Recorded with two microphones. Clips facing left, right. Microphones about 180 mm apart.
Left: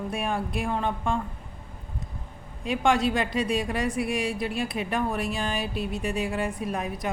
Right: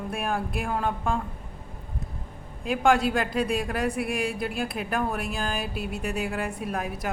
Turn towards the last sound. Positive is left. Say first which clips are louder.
# left 1 dB
turn(degrees=0)  # may be behind; listen again after turning